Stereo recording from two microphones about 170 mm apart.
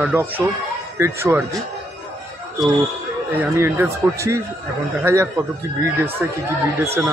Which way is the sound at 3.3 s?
10° right (ahead or behind).